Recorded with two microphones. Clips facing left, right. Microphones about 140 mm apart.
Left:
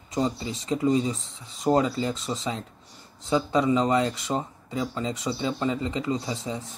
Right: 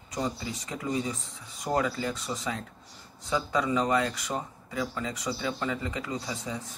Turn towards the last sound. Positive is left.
turn(degrees=25)  # may be behind; listen again after turning